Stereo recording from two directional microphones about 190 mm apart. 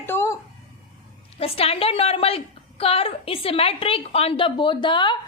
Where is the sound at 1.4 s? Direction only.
30° left (ahead or behind).